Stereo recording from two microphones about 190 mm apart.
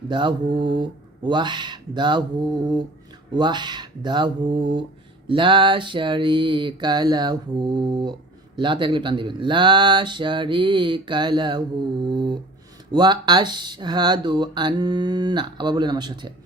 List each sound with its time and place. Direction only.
0.1 s speech: 25° right (ahead or behind)